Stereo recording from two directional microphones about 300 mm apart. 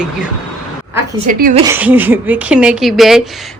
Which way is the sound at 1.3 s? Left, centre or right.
Right.